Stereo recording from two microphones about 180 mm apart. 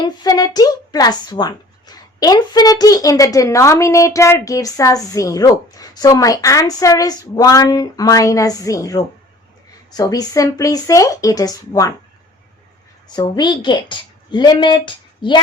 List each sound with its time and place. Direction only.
0.0 s a woman's voice: 20° left (ahead or behind)
13.1 s a woman's voice: 25° left (ahead or behind)